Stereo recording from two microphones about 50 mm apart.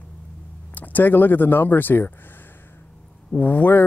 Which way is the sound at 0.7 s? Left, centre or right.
Left.